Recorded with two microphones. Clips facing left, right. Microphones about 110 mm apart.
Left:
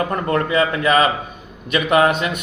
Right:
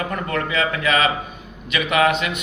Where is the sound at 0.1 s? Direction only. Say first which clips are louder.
Left 5 dB; 35° left (ahead or behind).